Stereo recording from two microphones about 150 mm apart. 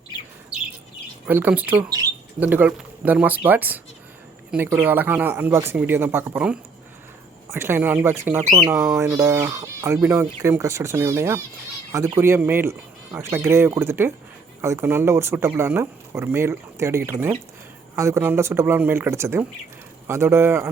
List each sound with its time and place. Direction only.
1.3 s speech: 10° right (ahead or behind)